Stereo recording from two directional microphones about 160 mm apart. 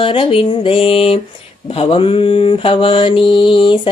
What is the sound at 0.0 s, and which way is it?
Mantra, 35° left (ahead or behind).